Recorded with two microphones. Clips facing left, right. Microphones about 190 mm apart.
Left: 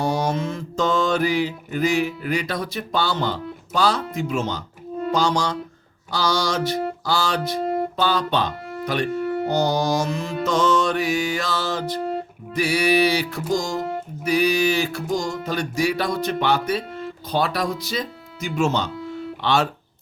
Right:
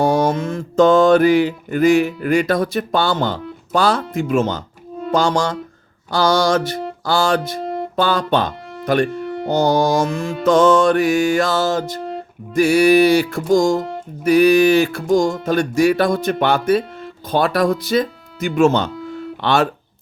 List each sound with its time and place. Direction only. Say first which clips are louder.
0.0 s mantra: right 6 dB; 50° right (ahead or behind)
5.1 s music: right 5 dB; 50° right (ahead or behind)
7.9 s speech: right 8 dB; 50° right (ahead or behind)
9.5 s music: right 7 dB; 50° right (ahead or behind)
17.2 s speech: right 7 dB; 50° right (ahead or behind)